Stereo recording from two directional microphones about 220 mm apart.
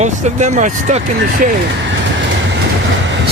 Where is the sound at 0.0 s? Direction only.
30° right (ahead or behind).